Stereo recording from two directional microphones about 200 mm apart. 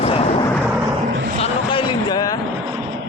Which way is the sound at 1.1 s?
50° right (ahead or behind).